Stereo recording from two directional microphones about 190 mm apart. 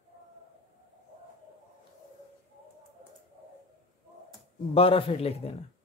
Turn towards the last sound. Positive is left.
turn(degrees=35)  # may be behind; listen again after turning